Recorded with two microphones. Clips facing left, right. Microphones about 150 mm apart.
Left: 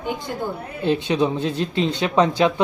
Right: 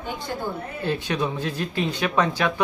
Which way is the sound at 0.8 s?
20° left (ahead or behind).